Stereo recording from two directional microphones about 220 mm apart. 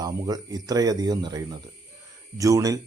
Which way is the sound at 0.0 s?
15° right (ahead or behind).